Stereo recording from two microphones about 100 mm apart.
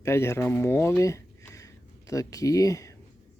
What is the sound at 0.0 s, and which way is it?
Speech, 25° left (ahead or behind).